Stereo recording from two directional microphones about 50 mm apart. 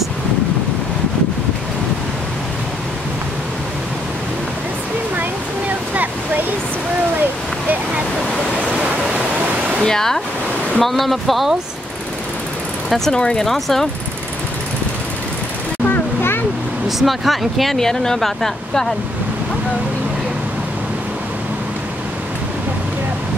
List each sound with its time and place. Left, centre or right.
9.8 s speech: centre
12.9 s speech: centre
15.9 s a sound: left
17.0 s speech: centre